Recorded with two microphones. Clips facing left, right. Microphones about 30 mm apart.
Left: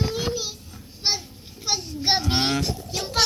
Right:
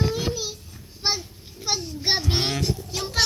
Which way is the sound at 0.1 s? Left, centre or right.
Left.